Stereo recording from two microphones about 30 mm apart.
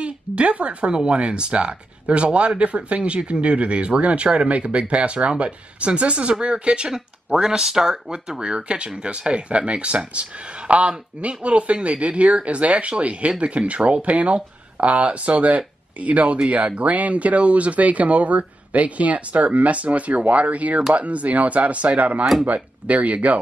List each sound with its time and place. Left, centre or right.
0.0 s speech: right
6.9 s speech: centre
8.4 s speech: right